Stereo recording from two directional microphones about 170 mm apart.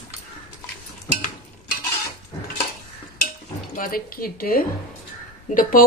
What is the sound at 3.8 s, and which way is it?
Dishes, 55° left (ahead or behind).